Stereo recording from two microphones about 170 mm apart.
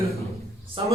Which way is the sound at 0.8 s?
30° right (ahead or behind).